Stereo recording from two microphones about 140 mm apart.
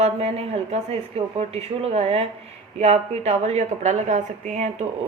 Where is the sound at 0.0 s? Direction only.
50° right (ahead or behind).